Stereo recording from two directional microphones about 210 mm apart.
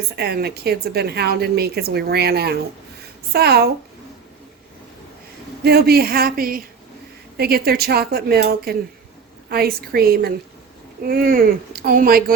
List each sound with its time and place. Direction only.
0.2 s a woman's voice: 50° right (ahead or behind)
5.6 s a woman's voice: 50° right (ahead or behind)